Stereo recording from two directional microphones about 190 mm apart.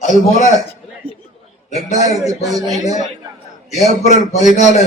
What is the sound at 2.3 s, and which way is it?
Speech, centre (ahead or behind).